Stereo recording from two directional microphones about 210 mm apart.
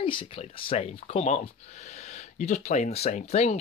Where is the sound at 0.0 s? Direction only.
25° left (ahead or behind).